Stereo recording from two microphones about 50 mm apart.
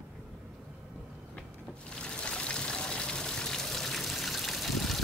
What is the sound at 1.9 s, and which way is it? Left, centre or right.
Trickle, centre.